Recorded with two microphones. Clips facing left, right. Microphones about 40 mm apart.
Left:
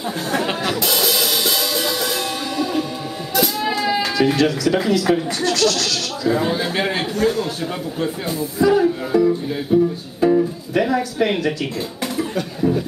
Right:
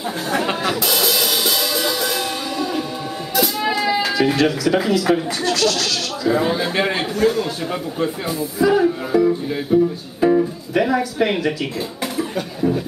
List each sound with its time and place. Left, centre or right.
0.3 s music: centre
3.6 s speech: centre
12.2 s a sound: centre